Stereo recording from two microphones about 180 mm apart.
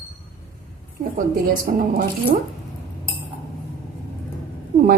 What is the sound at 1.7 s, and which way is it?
Speech, 55° right (ahead or behind).